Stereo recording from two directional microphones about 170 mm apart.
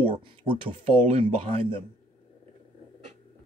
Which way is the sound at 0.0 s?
30° right (ahead or behind).